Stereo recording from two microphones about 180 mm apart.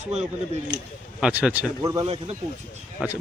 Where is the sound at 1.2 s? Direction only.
5° right (ahead or behind).